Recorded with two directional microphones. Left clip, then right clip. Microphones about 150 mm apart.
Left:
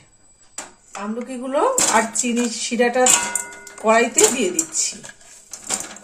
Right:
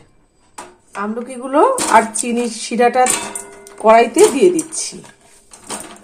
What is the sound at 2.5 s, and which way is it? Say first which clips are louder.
Speech: right 7 dB; 50° right (ahead or behind).